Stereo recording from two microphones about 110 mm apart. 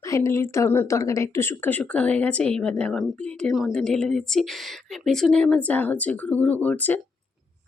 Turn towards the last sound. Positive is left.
turn(degrees=15)  # may be behind; listen again after turning